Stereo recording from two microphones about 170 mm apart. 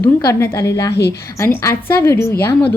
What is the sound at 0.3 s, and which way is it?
A woman's voice, 15° left (ahead or behind).